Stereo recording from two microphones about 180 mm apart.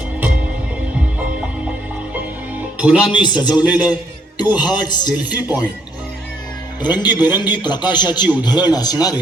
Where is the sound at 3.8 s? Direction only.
25° left (ahead or behind).